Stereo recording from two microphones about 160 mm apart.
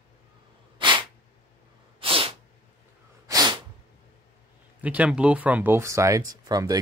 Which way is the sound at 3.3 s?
25° right (ahead or behind).